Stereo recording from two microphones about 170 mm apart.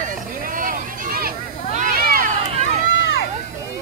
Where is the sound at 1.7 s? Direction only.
55° right (ahead or behind).